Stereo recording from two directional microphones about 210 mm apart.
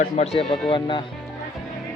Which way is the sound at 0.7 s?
20° left (ahead or behind).